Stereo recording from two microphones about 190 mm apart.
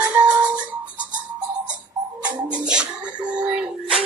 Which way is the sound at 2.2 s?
5° right (ahead or behind).